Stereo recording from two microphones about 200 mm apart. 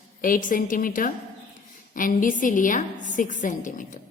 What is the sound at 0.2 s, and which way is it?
A woman's voice, 45° left (ahead or behind).